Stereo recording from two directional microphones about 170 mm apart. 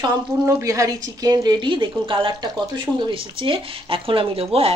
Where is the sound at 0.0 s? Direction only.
20° right (ahead or behind).